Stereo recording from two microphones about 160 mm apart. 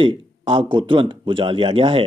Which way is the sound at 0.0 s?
30° right (ahead or behind).